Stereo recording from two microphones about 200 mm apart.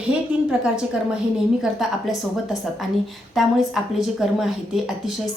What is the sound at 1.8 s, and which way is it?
A woman's voice, centre (ahead or behind).